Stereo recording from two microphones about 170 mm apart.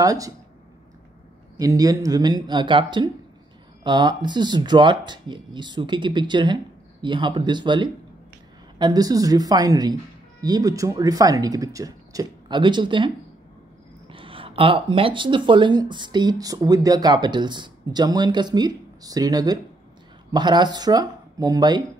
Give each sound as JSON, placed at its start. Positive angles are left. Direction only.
{"t": 0.0, "sound": "speech", "side_deg": -20}
{"t": 1.6, "sound": "speech", "side_deg": -20}